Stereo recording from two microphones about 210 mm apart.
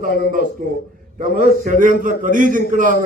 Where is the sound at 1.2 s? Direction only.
40° right (ahead or behind).